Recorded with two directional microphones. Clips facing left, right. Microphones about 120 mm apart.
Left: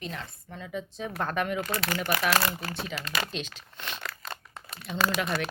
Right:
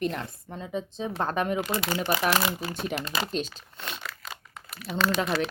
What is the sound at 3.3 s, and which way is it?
Speech, 40° right (ahead or behind).